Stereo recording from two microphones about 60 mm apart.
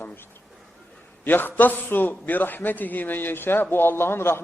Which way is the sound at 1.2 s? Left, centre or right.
Left.